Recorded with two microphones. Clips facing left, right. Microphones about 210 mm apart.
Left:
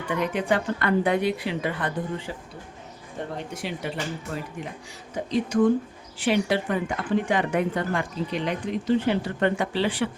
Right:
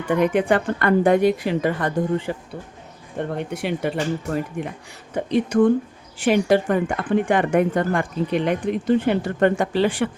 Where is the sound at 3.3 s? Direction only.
60° right (ahead or behind).